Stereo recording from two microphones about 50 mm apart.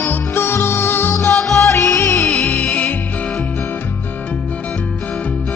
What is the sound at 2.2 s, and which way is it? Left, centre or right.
Music, centre.